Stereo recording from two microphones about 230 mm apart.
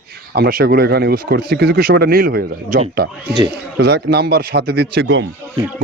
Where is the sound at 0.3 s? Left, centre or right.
Right.